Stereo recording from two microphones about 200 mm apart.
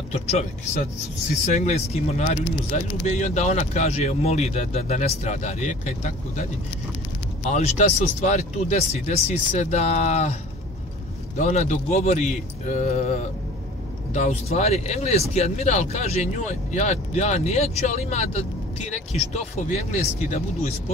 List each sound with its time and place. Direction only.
0.1 s speech: 30° left (ahead or behind)
7.4 s speech: 35° left (ahead or behind)
11.3 s speech: 35° left (ahead or behind)